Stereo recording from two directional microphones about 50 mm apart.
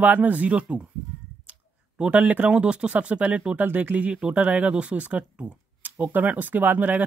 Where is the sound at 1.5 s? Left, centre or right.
Right.